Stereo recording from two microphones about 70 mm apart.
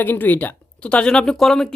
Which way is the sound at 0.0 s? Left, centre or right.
Left.